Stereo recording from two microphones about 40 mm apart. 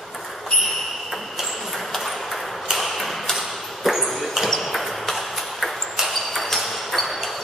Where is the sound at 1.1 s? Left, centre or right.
Centre.